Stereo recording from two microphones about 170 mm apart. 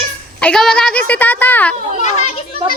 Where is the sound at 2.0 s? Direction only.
40° left (ahead or behind).